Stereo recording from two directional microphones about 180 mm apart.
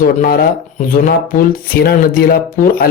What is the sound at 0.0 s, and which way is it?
Speech, 55° left (ahead or behind).